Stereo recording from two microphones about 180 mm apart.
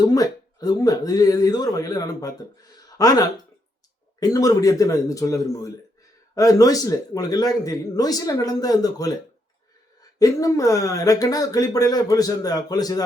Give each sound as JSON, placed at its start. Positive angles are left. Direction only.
{"t": 0.0, "sound": "speech", "side_deg": 20}
{"t": 10.2, "sound": "speech", "side_deg": 20}